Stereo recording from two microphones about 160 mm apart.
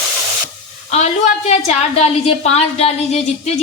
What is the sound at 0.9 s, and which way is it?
A woman's voice, 45° left (ahead or behind).